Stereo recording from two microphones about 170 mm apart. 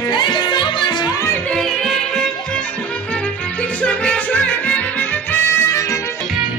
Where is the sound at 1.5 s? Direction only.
Centre (ahead or behind).